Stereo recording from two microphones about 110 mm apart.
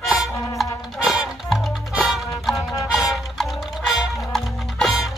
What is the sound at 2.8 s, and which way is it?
Music, 30° left (ahead or behind).